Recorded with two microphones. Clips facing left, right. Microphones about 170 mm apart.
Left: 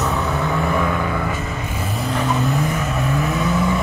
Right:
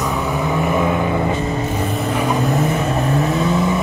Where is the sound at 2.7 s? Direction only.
35° right (ahead or behind).